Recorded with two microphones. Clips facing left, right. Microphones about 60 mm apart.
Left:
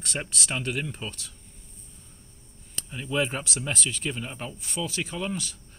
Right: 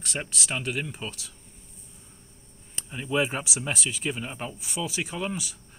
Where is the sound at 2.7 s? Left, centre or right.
Centre.